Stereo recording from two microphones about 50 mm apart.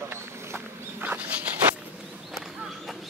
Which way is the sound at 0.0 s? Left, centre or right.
Right.